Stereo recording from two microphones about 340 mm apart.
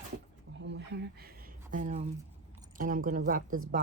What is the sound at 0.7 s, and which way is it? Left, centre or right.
Speech, right.